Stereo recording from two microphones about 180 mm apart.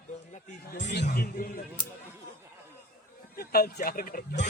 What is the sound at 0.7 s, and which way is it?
Speech, 70° left (ahead or behind).